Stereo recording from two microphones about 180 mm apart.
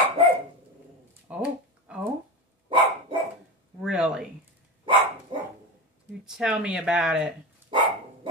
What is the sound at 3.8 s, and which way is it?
Speech, 5° right (ahead or behind).